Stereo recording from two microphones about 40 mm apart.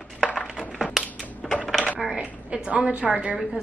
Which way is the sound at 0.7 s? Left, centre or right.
Centre.